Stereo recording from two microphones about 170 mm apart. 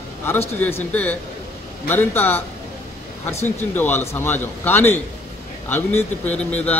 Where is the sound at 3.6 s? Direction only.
10° left (ahead or behind).